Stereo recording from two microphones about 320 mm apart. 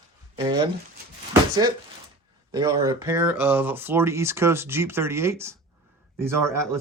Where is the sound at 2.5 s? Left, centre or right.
Centre.